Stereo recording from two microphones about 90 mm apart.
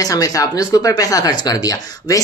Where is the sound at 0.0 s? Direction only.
40° left (ahead or behind).